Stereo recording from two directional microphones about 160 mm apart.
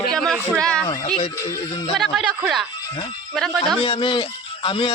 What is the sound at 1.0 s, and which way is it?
Speech, 40° left (ahead or behind).